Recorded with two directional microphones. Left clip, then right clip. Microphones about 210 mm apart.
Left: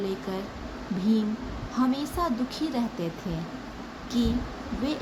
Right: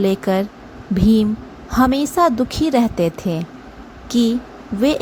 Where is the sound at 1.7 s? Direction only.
40° right (ahead or behind).